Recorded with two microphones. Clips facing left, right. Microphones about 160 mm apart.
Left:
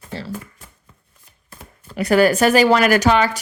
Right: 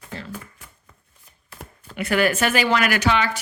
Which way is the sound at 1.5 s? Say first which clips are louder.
Left 1 dB; 40° left (ahead or behind).